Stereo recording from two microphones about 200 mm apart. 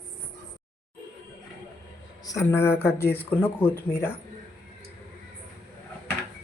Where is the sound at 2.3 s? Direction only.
15° left (ahead or behind).